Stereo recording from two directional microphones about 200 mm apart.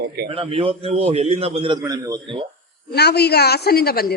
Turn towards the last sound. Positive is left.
turn(degrees=50)  # may be behind; listen again after turning